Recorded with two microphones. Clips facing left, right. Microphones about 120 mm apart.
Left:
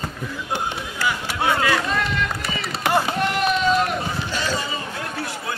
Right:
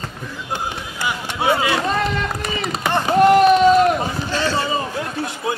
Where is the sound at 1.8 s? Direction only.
35° right (ahead or behind).